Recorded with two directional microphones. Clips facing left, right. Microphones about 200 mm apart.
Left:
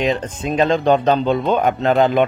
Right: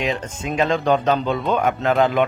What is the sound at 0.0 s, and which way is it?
Speech, 35° left (ahead or behind).